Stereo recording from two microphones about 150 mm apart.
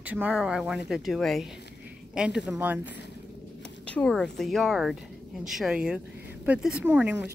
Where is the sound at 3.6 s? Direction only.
5° left (ahead or behind).